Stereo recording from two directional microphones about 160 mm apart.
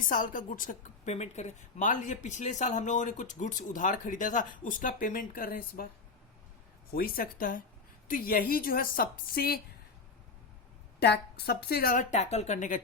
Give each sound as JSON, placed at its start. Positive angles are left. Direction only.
{"t": 0.1, "sound": "a woman's voice", "side_deg": 55}
{"t": 6.9, "sound": "a woman's voice", "side_deg": 65}
{"t": 11.0, "sound": "a woman's voice", "side_deg": 90}
{"t": 12.1, "sound": "a woman's voice", "side_deg": 45}